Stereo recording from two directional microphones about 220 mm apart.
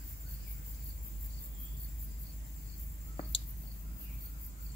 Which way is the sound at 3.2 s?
25° left (ahead or behind).